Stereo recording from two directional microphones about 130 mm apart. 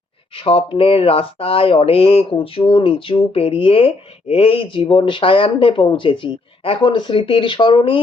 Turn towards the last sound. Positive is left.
turn(degrees=40)  # may be behind; listen again after turning